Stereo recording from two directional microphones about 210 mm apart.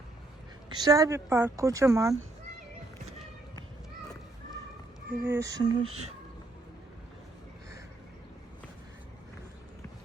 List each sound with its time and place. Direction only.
0.7 s a woman's voice: 20° right (ahead or behind)
5.2 s a woman's voice: 15° right (ahead or behind)